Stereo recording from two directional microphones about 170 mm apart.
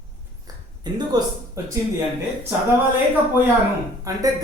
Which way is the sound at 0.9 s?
25° right (ahead or behind).